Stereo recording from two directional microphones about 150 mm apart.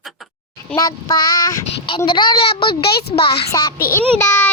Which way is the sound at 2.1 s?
35° left (ahead or behind).